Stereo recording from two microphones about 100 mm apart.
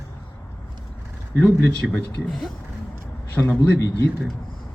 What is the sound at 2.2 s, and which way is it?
Speech, 5° left (ahead or behind).